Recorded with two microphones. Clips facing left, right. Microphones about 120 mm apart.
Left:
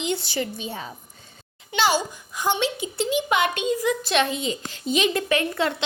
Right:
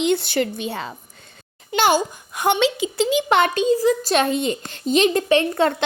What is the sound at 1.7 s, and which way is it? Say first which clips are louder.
A woman's voice: right 4 dB; 50° right (ahead or behind).